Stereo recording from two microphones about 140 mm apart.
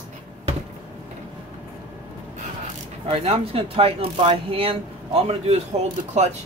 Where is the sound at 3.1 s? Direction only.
40° right (ahead or behind).